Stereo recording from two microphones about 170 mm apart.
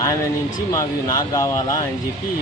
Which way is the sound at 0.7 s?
20° left (ahead or behind).